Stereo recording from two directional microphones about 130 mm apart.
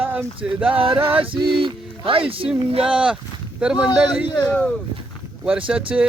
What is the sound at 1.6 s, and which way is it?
Speech, 40° right (ahead or behind).